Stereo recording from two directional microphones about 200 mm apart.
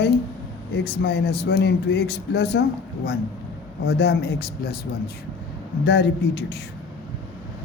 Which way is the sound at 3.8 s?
55° left (ahead or behind).